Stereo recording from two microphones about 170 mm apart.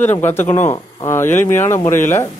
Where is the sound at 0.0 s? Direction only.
10° left (ahead or behind).